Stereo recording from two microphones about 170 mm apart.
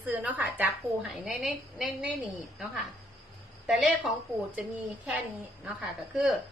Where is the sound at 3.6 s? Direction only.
5° right (ahead or behind).